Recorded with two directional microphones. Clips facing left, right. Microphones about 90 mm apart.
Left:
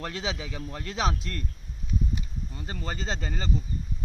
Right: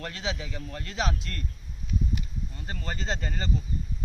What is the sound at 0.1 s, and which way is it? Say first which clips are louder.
Speech: left 1 dB; 20° left (ahead or behind).